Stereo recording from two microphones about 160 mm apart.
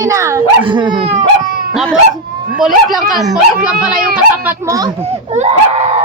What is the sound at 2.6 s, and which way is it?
A child's voice, centre (ahead or behind).